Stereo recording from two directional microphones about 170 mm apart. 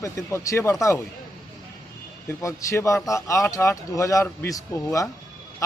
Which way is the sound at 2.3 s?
15° left (ahead or behind).